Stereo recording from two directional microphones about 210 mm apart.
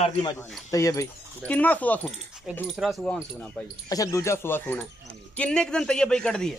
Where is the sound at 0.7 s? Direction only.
15° left (ahead or behind).